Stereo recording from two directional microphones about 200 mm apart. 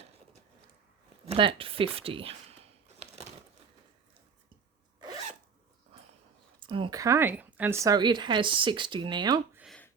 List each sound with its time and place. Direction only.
1.3 s speech: 25° right (ahead or behind)
4.9 s zipper: 20° right (ahead or behind)
6.6 s speech: 25° right (ahead or behind)
9.6 s a sound: centre (ahead or behind)